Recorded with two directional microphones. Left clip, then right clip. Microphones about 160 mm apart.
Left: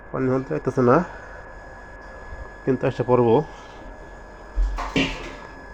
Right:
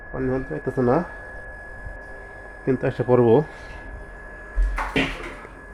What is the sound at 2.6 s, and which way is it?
Speech, 15° right (ahead or behind).